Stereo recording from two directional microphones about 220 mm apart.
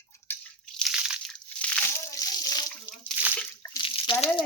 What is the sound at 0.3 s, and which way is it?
Crunch, 5° left (ahead or behind).